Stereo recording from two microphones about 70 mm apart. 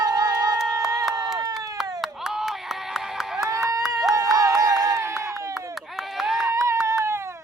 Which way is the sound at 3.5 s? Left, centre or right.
Right.